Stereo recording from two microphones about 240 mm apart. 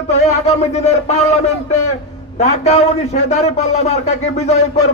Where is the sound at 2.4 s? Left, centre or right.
Left.